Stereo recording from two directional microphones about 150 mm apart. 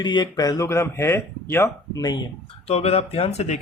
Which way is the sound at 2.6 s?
45° left (ahead or behind).